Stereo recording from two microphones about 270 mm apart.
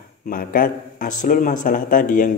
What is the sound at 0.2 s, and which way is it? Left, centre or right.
A man's voice, left.